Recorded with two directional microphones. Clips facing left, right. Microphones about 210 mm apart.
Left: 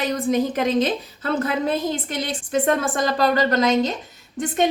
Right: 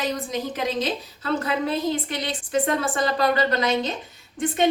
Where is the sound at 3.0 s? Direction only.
45° left (ahead or behind).